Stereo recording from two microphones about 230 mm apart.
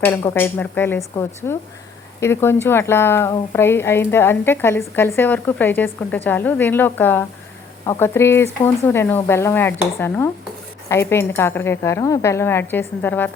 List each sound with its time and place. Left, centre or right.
0.0 s speech: centre